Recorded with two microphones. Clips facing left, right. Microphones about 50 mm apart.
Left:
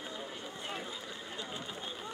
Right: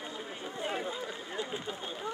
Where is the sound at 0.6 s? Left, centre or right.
Right.